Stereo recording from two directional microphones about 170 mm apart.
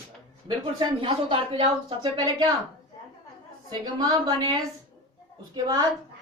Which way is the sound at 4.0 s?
25° right (ahead or behind).